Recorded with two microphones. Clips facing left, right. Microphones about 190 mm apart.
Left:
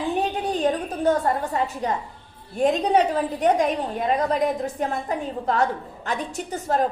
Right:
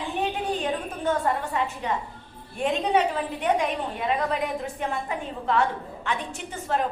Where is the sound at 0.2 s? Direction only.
40° left (ahead or behind).